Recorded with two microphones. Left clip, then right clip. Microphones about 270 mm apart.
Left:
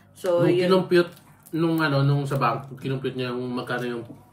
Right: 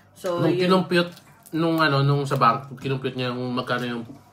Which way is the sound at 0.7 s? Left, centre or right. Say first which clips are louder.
Left 1 dB; right.